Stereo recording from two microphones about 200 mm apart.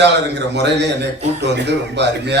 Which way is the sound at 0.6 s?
60° right (ahead or behind).